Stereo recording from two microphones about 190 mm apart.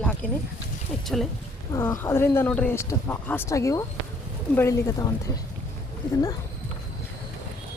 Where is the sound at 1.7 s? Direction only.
10° left (ahead or behind).